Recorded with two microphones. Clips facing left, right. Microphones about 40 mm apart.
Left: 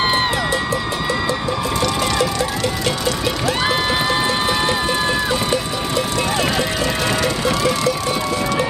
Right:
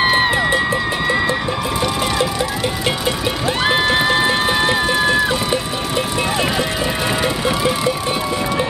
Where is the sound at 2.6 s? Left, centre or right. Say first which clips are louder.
Right 1 dB; right.